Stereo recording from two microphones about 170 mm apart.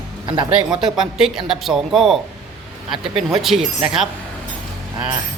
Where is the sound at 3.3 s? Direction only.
Centre (ahead or behind).